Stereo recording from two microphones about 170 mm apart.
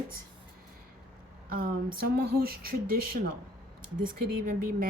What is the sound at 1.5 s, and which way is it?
Speech, 55° right (ahead or behind).